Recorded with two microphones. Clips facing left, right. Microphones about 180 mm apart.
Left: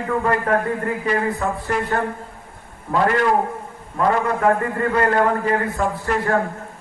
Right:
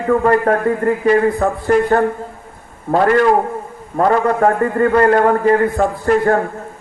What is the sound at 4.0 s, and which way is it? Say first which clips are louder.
A man's voice: right 5 dB; 45° right (ahead or behind).